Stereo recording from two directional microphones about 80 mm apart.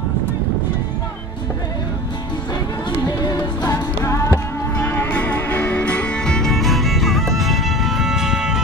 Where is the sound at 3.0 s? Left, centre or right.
Left.